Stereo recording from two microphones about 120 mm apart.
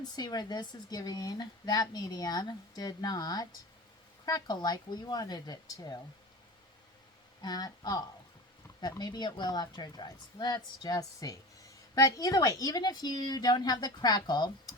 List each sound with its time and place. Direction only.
0.0 s speech: 35° left (ahead or behind)
7.4 s speech: 35° left (ahead or behind)